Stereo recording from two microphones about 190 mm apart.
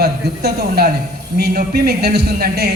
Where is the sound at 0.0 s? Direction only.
55° right (ahead or behind).